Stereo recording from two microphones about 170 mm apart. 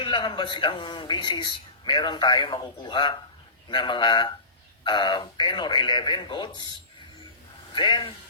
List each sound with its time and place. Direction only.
0.0 s speech: 25° left (ahead or behind)
7.7 s speech: 30° left (ahead or behind)